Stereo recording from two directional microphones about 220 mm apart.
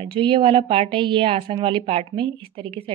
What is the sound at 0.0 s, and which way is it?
Speech, 25° right (ahead or behind).